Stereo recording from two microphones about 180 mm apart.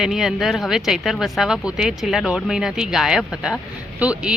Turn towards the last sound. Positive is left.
turn(degrees=-5)  # may be behind; listen again after turning